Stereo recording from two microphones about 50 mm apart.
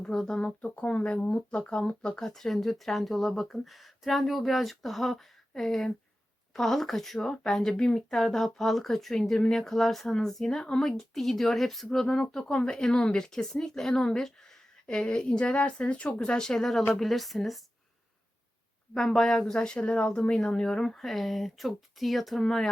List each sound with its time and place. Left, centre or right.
0.1 s speech: centre
0.4 s speech: left; by 17.6 s centre
18.9 s speech: centre
19.5 s speech: left
21.0 s speech: centre